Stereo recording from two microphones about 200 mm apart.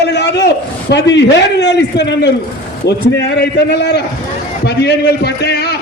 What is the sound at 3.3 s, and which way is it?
A man's voice, 55° left (ahead or behind).